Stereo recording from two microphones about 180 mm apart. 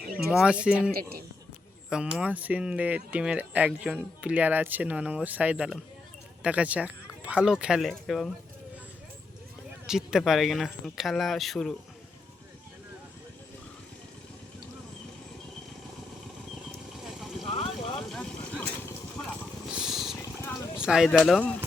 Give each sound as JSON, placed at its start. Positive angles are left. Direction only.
{"t": 0.3, "sound": "speech", "side_deg": -5}
{"t": 2.1, "sound": "speech", "side_deg": -10}
{"t": 9.8, "sound": "speech", "side_deg": -5}
{"t": 17.0, "sound": "clip-clop", "side_deg": 0}
{"t": 17.4, "sound": "a sound", "side_deg": 30}
{"t": 18.1, "sound": "vehicle", "side_deg": 5}
{"t": 19.7, "sound": "a sound", "side_deg": 0}
{"t": 20.7, "sound": "speech", "side_deg": -5}